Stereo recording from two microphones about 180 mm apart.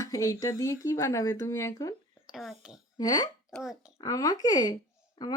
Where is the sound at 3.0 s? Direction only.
20° left (ahead or behind).